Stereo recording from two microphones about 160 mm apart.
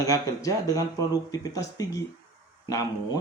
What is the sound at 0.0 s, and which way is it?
Speech, 20° left (ahead or behind).